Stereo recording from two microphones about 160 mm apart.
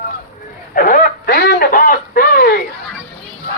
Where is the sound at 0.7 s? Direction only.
60° left (ahead or behind).